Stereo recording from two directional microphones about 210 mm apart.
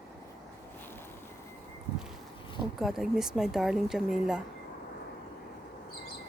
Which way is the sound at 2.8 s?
Centre (ahead or behind).